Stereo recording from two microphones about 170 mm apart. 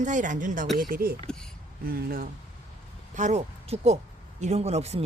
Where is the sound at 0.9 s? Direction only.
60° right (ahead or behind).